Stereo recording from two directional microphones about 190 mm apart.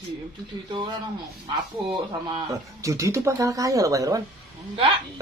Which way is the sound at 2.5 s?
15° right (ahead or behind).